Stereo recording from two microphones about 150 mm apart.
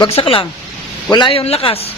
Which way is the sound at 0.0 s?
35° left (ahead or behind).